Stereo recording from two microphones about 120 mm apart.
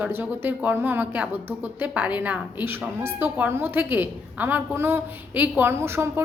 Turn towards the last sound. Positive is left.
turn(degrees=-20)  # may be behind; listen again after turning